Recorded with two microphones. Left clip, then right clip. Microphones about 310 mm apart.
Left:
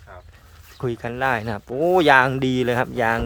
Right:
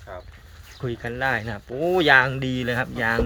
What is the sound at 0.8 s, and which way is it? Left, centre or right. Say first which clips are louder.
Speech: left 3 dB; centre.